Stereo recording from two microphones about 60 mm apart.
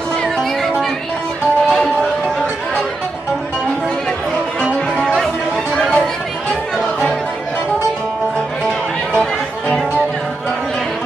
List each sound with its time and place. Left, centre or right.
0.2 s music: centre
1.7 s music: centre
5.0 s music: centre
5.8 s chatter: centre